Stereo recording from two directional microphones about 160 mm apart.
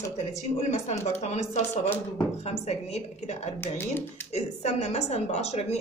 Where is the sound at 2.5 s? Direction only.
45° left (ahead or behind).